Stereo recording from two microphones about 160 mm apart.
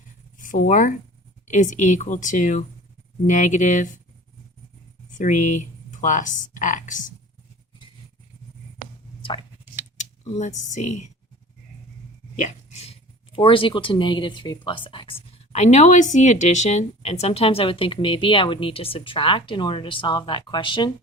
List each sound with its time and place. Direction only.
0.3 s speech: 55° left (ahead or behind)
5.1 s speech: 50° left (ahead or behind)
10.0 s speech: 45° left (ahead or behind)
12.4 s speech: 45° left (ahead or behind)